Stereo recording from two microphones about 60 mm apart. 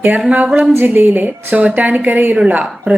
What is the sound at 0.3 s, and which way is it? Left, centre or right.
Speech, right.